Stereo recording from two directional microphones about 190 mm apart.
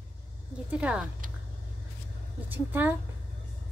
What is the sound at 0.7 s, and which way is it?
Speech, 5° right (ahead or behind).